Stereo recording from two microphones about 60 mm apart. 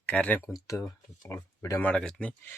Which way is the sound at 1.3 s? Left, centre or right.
Left.